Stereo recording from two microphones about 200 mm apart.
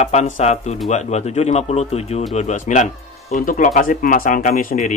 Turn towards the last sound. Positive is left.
turn(degrees=40)  # may be behind; listen again after turning